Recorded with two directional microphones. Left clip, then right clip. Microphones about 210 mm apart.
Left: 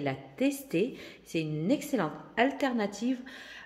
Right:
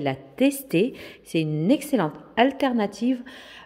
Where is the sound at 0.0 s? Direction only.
40° right (ahead or behind).